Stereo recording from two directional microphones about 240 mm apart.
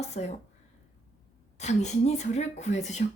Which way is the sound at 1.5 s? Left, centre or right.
Left.